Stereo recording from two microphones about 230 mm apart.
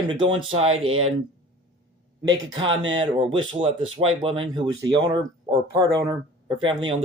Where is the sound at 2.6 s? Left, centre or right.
Right.